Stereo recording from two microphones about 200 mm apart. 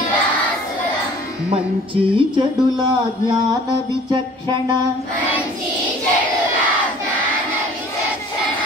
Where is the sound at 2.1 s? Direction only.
20° right (ahead or behind).